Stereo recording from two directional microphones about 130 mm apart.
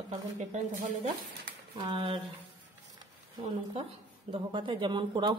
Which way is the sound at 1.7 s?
40° right (ahead or behind).